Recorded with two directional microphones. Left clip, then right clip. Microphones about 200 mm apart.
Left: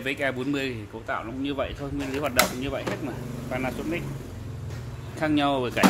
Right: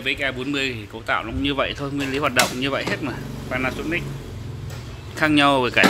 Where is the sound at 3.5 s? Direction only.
Centre (ahead or behind).